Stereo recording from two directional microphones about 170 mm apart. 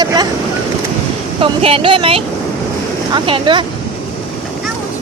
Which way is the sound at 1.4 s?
35° right (ahead or behind).